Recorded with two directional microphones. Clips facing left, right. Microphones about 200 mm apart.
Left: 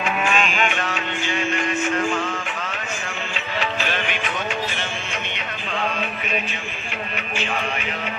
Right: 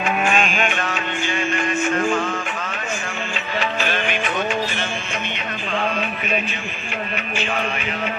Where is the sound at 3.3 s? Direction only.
45° right (ahead or behind).